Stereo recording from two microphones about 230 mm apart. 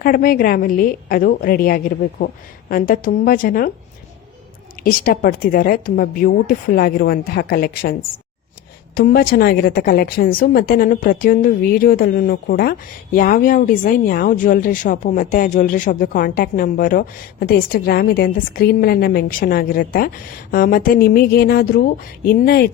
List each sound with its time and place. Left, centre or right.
0.0 s a woman's voice: left
4.8 s a woman's voice: left
9.0 s a woman's voice: left